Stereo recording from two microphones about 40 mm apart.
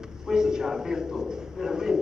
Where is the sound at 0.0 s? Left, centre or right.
Centre.